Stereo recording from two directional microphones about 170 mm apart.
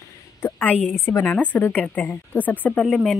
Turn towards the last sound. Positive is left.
turn(degrees=0)  # may be behind; listen again after turning